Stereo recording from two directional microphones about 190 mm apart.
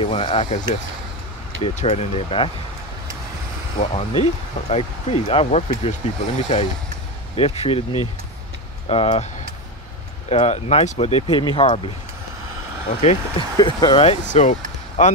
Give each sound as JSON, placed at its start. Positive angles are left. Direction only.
{"t": 0.0, "sound": "speech", "side_deg": 30}
{"t": 1.6, "sound": "speech", "side_deg": 35}
{"t": 3.8, "sound": "speech", "side_deg": 35}
{"t": 10.3, "sound": "speech", "side_deg": 35}
{"t": 13.0, "sound": "speech", "side_deg": 35}
{"t": 13.6, "sound": "speech", "side_deg": 20}
{"t": 14.3, "sound": "speech", "side_deg": 40}